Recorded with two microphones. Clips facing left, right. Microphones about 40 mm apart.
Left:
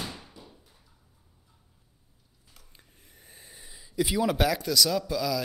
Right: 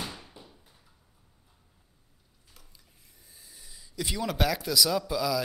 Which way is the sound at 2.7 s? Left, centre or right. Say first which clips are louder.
Left 4 dB; left.